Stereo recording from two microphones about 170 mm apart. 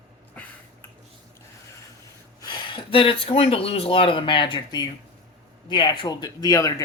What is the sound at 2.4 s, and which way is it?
Speech, 30° left (ahead or behind).